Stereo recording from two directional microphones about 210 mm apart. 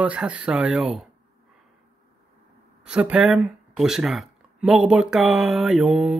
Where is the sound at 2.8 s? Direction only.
5° right (ahead or behind).